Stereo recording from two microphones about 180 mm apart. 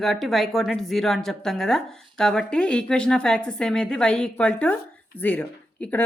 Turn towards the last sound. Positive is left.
turn(degrees=10)  # may be behind; listen again after turning